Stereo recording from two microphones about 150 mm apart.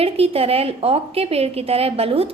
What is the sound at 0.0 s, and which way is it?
A woman's voice, 40° right (ahead or behind).